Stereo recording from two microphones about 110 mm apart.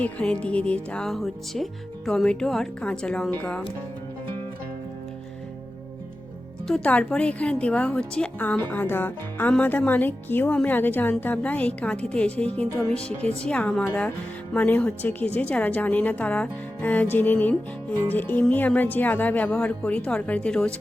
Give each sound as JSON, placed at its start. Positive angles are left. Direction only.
{"t": 0.0, "sound": "speech", "side_deg": 10}
{"t": 6.7, "sound": "speech", "side_deg": 10}
{"t": 12.6, "sound": "speech", "side_deg": 25}
{"t": 13.1, "sound": "speech", "side_deg": 10}